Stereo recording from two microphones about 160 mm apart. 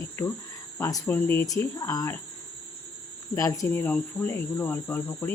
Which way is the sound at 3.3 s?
20° left (ahead or behind).